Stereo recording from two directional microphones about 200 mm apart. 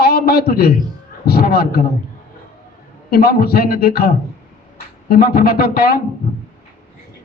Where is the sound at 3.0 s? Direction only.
50° left (ahead or behind).